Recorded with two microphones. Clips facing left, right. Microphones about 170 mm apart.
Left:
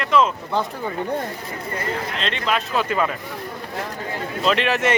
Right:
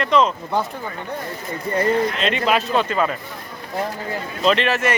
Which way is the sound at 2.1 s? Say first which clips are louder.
Right 4 dB; 5° right (ahead or behind).